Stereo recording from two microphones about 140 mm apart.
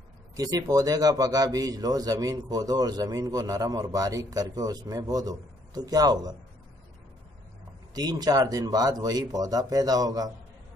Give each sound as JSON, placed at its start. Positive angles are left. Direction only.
{"t": 0.4, "sound": "a man's voice", "side_deg": -25}
{"t": 7.9, "sound": "a man's voice", "side_deg": -30}